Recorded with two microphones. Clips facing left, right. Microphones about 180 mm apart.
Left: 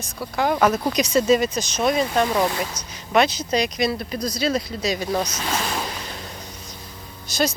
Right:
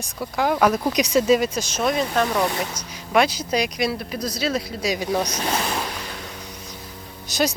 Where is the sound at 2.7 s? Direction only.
10° right (ahead or behind).